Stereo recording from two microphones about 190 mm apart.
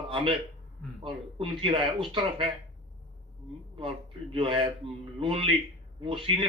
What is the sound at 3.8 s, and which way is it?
A man's voice, 30° right (ahead or behind).